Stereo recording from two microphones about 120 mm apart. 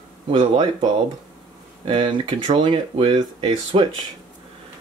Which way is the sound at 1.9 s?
45° right (ahead or behind).